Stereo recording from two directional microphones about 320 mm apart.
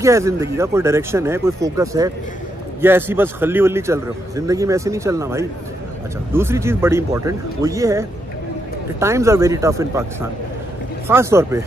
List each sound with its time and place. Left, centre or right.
0.0 s a man's voice: centre
11.1 s a man's voice: centre